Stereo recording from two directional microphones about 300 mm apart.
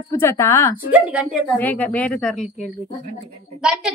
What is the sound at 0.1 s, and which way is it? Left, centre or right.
Speech, centre.